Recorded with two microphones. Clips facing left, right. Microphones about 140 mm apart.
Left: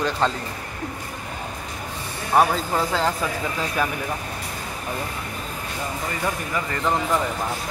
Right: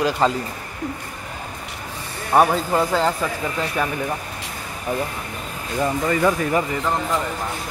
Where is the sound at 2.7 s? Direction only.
Centre (ahead or behind).